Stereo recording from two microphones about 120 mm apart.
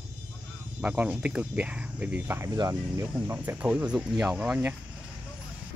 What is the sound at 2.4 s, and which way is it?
Speech, 30° right (ahead or behind).